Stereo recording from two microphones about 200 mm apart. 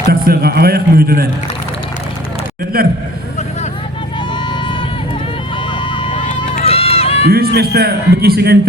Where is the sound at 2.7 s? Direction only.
50° right (ahead or behind).